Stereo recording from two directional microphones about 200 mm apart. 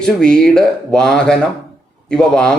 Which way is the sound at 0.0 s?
5° left (ahead or behind).